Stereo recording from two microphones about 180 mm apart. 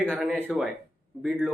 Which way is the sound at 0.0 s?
10° right (ahead or behind).